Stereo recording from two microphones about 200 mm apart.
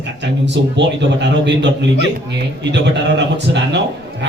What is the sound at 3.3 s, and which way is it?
Speech, 60° right (ahead or behind).